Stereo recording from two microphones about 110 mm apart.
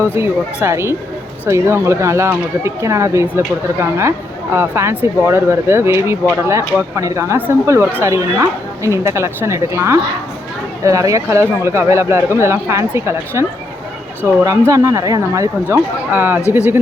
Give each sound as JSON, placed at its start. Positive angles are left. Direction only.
{"t": 0.0, "sound": "speech", "side_deg": -25}
{"t": 16.1, "sound": "speech", "side_deg": -15}